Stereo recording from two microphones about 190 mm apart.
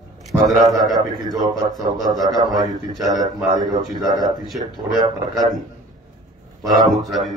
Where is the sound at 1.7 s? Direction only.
20° right (ahead or behind).